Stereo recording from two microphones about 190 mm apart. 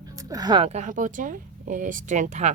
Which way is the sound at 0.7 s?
40° right (ahead or behind).